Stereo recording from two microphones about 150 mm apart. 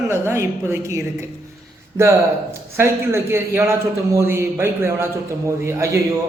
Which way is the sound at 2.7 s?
15° right (ahead or behind).